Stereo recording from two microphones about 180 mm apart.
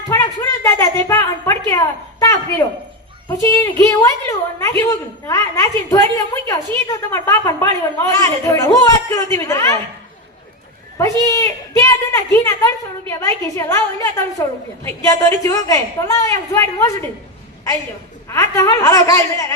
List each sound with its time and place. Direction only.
0.1 s a woman's voice: 20° left (ahead or behind)
10.9 s a woman's voice: 20° left (ahead or behind)
18.3 s speech: 15° left (ahead or behind)